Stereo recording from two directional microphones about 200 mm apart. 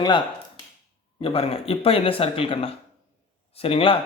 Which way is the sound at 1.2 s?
30° left (ahead or behind).